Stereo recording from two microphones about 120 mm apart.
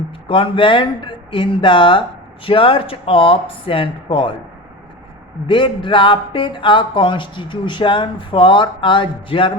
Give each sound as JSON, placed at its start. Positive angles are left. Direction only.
{"t": 0.3, "sound": "speech", "side_deg": 45}
{"t": 5.5, "sound": "speech", "side_deg": 45}